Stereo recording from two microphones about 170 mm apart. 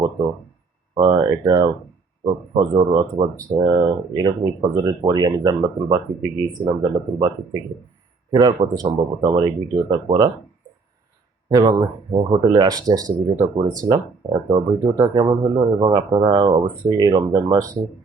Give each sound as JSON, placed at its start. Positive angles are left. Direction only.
{"t": 0.9, "sound": "speech", "side_deg": -25}
{"t": 11.4, "sound": "speech", "side_deg": -20}